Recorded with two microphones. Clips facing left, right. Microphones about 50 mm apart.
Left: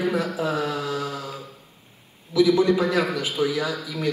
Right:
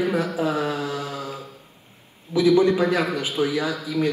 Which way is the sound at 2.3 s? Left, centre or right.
Right.